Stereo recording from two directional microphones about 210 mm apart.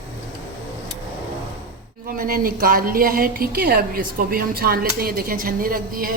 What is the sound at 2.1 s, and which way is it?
A woman's voice, 45° right (ahead or behind).